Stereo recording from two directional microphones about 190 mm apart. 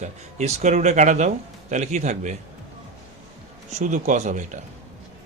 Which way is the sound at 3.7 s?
40° right (ahead or behind).